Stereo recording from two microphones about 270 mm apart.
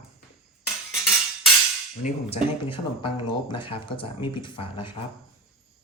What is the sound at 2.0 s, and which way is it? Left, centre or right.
Speech, left.